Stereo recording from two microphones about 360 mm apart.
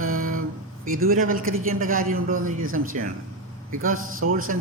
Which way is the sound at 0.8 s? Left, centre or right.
Right.